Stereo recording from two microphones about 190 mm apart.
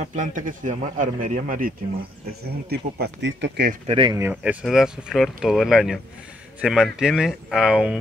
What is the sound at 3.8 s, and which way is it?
Speech, 30° right (ahead or behind).